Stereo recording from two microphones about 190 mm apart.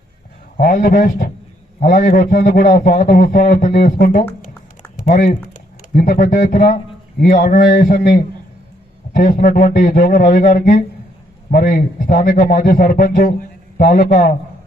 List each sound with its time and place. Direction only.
0.5 s a man's voice: 45° left (ahead or behind)